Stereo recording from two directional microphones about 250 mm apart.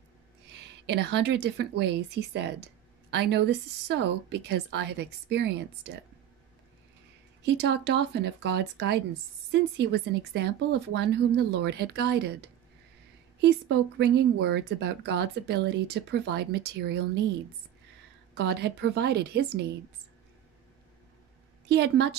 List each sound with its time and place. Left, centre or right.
0.5 s a woman's voice: right
7.4 s a woman's voice: right
13.4 s a woman's voice: right
18.3 s a woman's voice: right
21.6 s a woman's voice: right